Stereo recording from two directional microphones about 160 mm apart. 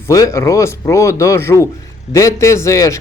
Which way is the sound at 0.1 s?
20° left (ahead or behind).